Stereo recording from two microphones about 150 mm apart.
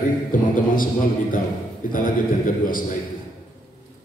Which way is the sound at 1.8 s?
65° left (ahead or behind).